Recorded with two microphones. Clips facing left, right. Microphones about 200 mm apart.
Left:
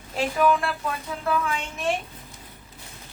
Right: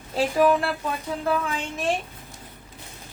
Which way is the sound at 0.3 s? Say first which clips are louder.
Right 2 dB; 35° right (ahead or behind).